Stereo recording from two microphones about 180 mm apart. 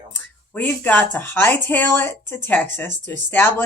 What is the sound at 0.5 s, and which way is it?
Speech, 10° left (ahead or behind).